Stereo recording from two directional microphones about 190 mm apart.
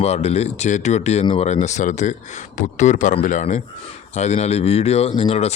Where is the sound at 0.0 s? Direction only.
35° left (ahead or behind).